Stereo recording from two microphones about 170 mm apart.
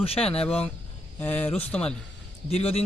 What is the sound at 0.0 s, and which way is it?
Speech, 35° left (ahead or behind).